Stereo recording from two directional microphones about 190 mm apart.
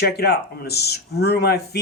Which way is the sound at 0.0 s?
55° left (ahead or behind).